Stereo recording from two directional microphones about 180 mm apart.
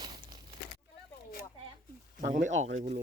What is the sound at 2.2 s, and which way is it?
Speech, 50° right (ahead or behind).